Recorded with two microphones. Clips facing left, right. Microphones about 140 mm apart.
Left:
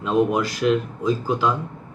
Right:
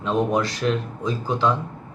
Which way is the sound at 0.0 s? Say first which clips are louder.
Left 2 dB; 5° left (ahead or behind).